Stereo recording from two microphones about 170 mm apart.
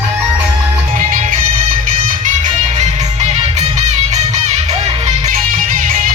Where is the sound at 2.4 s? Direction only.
40° right (ahead or behind).